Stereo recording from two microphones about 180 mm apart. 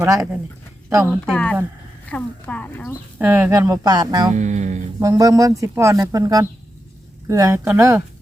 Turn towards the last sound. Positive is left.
turn(degrees=-15)  # may be behind; listen again after turning